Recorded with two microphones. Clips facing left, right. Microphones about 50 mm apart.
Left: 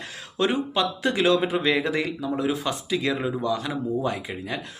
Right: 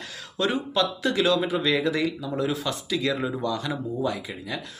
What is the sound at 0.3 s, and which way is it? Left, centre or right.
Speech, left.